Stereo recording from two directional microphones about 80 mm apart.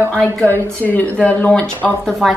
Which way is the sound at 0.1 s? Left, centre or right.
Centre.